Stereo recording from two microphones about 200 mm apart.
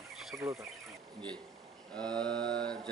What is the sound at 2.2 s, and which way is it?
Mantra, 55° right (ahead or behind).